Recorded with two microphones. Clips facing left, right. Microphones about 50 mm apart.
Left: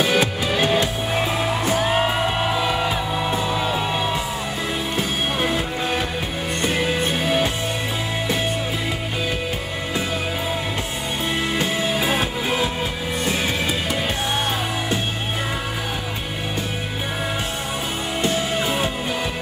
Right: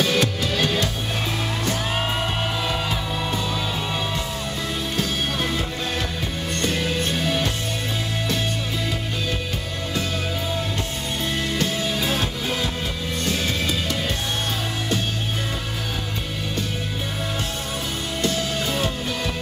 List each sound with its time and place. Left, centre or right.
0.0 s music: centre
11.5 s music: centre
18.2 s music: left